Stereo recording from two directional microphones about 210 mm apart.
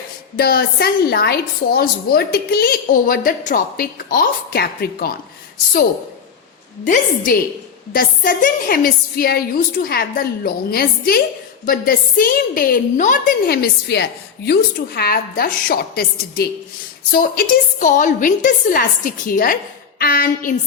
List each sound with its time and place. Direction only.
0.3 s a woman's voice: 45° left (ahead or behind)
6.8 s a woman's voice: 40° left (ahead or behind)